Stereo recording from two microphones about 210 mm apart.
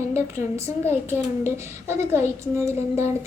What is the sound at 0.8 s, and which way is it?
A woman's voice, 10° right (ahead or behind).